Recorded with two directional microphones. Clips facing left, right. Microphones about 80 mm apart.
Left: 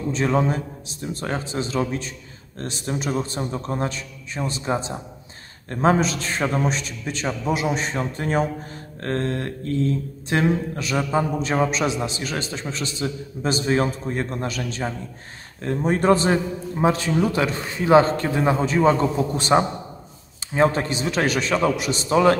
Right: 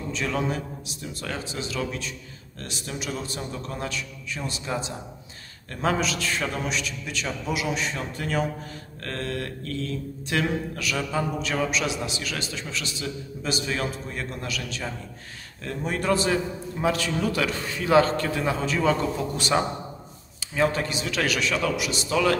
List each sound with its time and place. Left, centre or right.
0.1 s a man's voice: left